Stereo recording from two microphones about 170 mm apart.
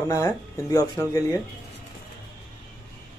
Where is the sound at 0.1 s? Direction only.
20° left (ahead or behind).